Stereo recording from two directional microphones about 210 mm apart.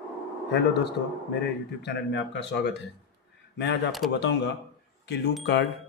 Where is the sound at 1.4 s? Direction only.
55° left (ahead or behind).